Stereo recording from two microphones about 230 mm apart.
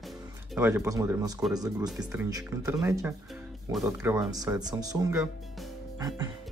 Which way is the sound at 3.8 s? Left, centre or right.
Centre.